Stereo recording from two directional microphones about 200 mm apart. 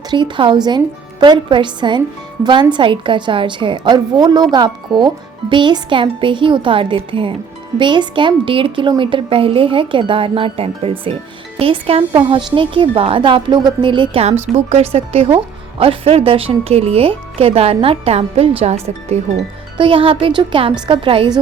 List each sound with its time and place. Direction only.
0.1 s a woman's voice: 25° right (ahead or behind)